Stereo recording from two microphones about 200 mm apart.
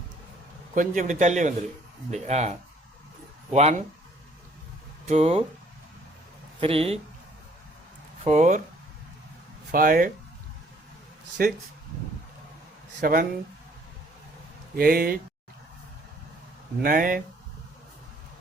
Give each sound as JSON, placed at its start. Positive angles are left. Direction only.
{"t": 0.8, "sound": "a man's voice", "side_deg": -40}
{"t": 5.0, "sound": "a man's voice", "side_deg": -35}
{"t": 6.6, "sound": "speech", "side_deg": -30}
{"t": 8.2, "sound": "a man's voice", "side_deg": -35}
{"t": 9.7, "sound": "speech", "side_deg": -45}
{"t": 11.4, "sound": "speech", "side_deg": -50}
{"t": 13.0, "sound": "speech", "side_deg": -50}
{"t": 14.8, "sound": "speech", "side_deg": -50}
{"t": 16.8, "sound": "speech", "side_deg": -45}